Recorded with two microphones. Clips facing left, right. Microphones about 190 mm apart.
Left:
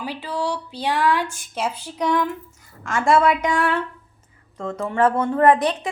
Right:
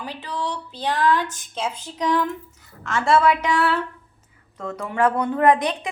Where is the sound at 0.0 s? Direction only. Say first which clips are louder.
Left 3 dB; 10° left (ahead or behind).